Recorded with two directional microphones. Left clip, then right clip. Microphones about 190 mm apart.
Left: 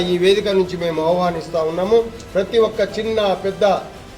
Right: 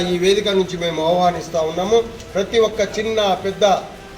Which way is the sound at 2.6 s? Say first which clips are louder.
Right 1 dB; 5° left (ahead or behind).